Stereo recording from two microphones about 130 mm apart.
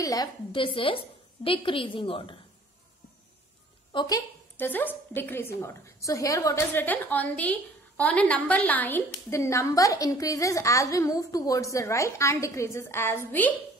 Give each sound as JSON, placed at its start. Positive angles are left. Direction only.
{"t": 0.0, "sound": "a woman's voice", "side_deg": 25}
{"t": 0.5, "sound": "a woman's voice", "side_deg": 45}
{"t": 3.9, "sound": "a woman's voice", "side_deg": 30}
{"t": 4.6, "sound": "a woman's voice", "side_deg": 15}